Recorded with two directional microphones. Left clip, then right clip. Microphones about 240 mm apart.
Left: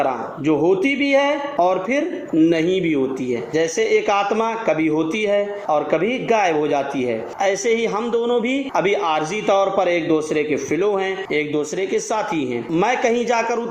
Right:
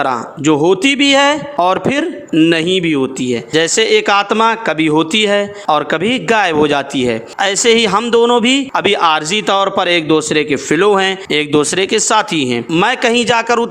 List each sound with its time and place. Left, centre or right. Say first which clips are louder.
0.0 s a man's voice: right 5 dB; right
0.8 s speech: right 7 dB; right